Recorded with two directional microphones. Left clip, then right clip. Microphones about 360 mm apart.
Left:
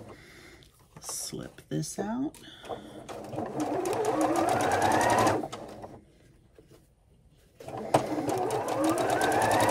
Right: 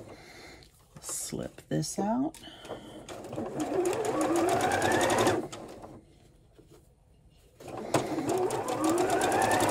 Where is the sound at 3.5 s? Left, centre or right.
Centre.